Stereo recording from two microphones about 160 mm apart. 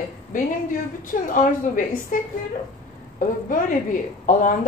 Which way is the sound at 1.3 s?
55° left (ahead or behind).